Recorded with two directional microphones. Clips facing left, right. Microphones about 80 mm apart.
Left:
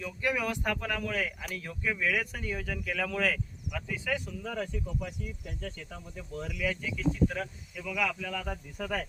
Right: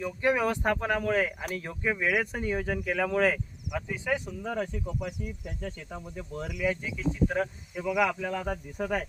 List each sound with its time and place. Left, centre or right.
0.0 s speech: right
7.3 s speech: right
8.4 s speech: centre